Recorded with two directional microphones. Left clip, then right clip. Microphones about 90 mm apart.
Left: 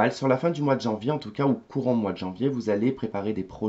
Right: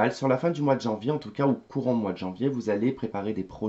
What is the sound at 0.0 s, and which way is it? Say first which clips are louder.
Speech: left 1 dB; 25° left (ahead or behind).